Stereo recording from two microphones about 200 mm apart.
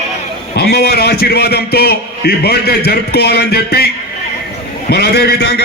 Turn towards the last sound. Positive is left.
turn(degrees=55)  # may be behind; listen again after turning